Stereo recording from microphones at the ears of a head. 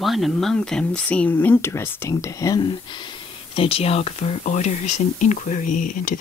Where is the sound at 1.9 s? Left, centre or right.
Left.